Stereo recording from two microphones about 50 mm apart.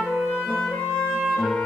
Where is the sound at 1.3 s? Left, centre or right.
Centre.